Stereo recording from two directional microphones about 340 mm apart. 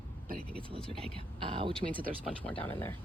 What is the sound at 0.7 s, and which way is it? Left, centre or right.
A woman's voice, centre.